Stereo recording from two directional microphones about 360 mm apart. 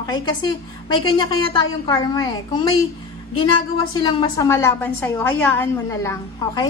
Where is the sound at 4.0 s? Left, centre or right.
Centre.